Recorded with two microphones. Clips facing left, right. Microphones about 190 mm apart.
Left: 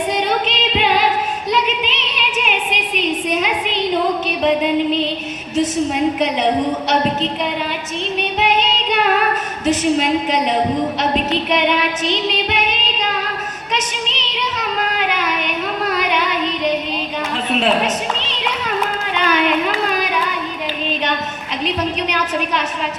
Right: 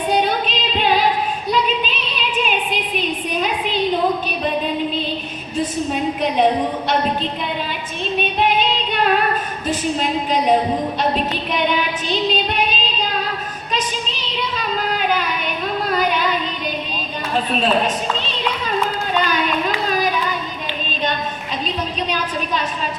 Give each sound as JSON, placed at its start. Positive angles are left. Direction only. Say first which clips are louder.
{"t": 0.1, "sound": "singing", "louder": "even", "side_deg": 80}
{"t": 1.5, "sound": "a sound", "louder": "right 1 dB", "side_deg": 80}
{"t": 4.3, "sound": "music", "louder": "left 5 dB", "side_deg": 75}
{"t": 5.5, "sound": "a woman's voice", "louder": "left 4 dB", "side_deg": 80}
{"t": 8.4, "sound": "music", "louder": "left 1 dB", "side_deg": 80}
{"t": 9.6, "sound": "a sound", "louder": "left 6 dB", "side_deg": 80}
{"t": 21.6, "sound": "a woman's voice", "louder": "left 5 dB", "side_deg": 75}